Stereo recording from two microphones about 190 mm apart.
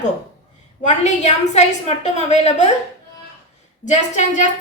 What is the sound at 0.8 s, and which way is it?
A woman's voice, 40° left (ahead or behind).